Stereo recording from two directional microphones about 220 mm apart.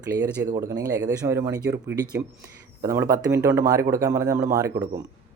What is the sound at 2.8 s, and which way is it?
Speech, 15° right (ahead or behind).